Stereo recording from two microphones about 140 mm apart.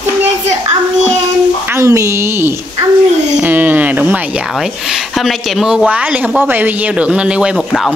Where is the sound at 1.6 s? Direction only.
20° right (ahead or behind).